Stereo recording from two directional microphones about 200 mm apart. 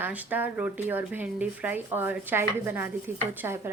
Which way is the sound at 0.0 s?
10° right (ahead or behind).